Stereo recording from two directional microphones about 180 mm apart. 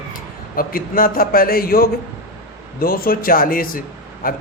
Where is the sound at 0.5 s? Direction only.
55° left (ahead or behind).